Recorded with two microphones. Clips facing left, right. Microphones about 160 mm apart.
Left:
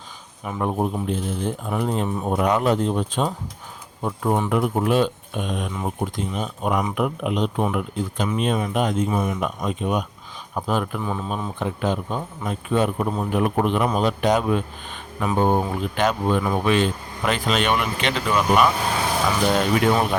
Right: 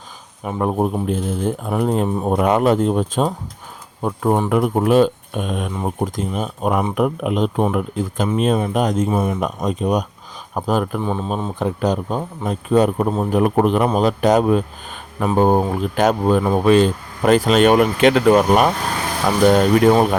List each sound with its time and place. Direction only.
0.4 s speech: 40° right (ahead or behind)
1.0 s speech: 50° right (ahead or behind)
5.7 s speech: 35° right (ahead or behind)
11.0 s speech: 30° right (ahead or behind)